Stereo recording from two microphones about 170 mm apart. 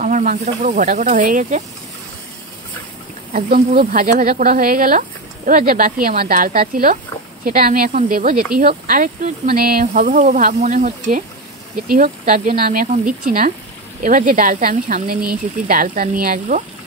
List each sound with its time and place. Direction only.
0.0 s speech: 45° right (ahead or behind)
3.3 s speech: 55° right (ahead or behind)